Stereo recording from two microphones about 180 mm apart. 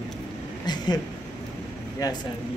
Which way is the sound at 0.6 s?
25° left (ahead or behind).